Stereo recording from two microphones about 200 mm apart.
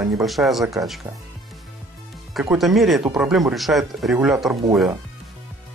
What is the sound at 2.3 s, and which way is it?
Speech, centre (ahead or behind).